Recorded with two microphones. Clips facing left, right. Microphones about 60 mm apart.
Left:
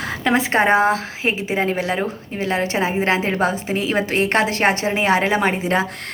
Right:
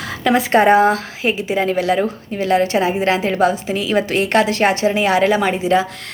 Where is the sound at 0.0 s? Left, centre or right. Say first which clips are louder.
Right 2 dB; left.